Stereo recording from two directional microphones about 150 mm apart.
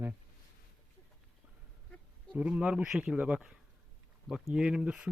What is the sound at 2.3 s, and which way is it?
Speech, 10° right (ahead or behind).